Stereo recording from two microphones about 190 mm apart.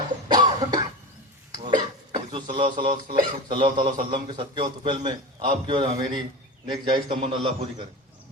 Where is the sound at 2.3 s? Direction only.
25° right (ahead or behind).